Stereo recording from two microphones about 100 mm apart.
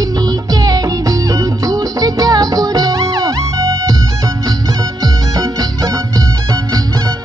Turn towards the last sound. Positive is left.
turn(degrees=-35)  # may be behind; listen again after turning